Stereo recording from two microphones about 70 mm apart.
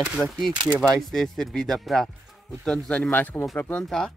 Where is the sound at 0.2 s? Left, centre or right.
Centre; by 3.8 s left.